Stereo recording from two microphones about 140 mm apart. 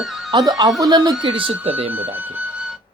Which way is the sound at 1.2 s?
40° right (ahead or behind).